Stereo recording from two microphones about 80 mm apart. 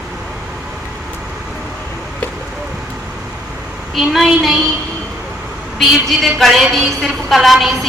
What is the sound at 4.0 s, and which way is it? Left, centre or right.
Speech, centre.